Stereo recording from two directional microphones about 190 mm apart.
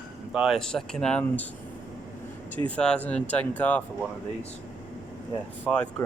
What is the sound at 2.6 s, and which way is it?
Speech, 5° left (ahead or behind).